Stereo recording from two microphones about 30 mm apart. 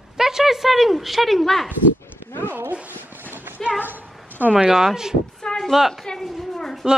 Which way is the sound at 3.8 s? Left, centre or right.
Right.